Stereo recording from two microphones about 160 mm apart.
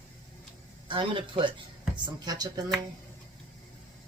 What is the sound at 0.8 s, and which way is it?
Speech, 30° right (ahead or behind).